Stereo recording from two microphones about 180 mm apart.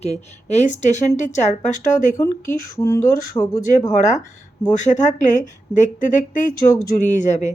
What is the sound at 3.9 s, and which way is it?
A woman's voice, 40° left (ahead or behind).